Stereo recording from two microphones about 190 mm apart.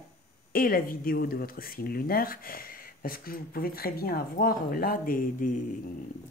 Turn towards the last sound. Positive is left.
turn(degrees=45)  # may be behind; listen again after turning